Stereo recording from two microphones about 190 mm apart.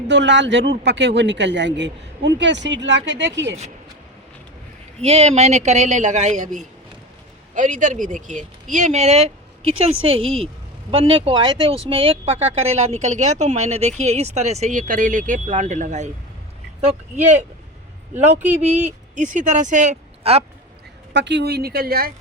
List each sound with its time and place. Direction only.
0.1 s a man's voice: 70° right (ahead or behind)
4.9 s a woman's voice: 30° right (ahead or behind)
18.6 s speech: 35° right (ahead or behind)
21.1 s speech: 65° right (ahead or behind)